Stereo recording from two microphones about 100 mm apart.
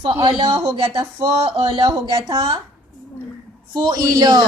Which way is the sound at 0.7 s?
60° right (ahead or behind).